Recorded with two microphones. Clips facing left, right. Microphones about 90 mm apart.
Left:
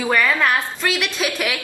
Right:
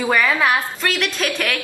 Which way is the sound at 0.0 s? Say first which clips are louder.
Right 1 dB; 5° right (ahead or behind).